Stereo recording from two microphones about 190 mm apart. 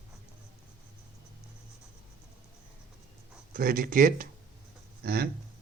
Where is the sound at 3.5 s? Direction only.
50° right (ahead or behind).